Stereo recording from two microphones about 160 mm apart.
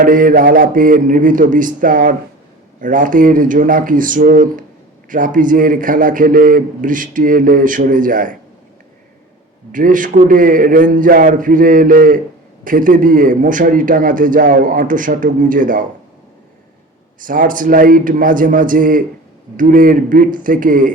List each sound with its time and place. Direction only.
0.0 s a man's voice: 60° right (ahead or behind)
9.7 s a man's voice: 55° right (ahead or behind)
17.2 s a man's voice: 60° right (ahead or behind)